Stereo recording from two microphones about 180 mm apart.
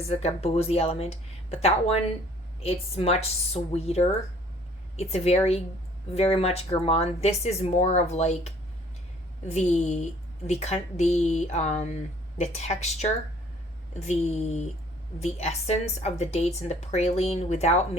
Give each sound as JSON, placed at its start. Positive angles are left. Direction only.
{"t": 0.1, "sound": "a woman's voice", "side_deg": 35}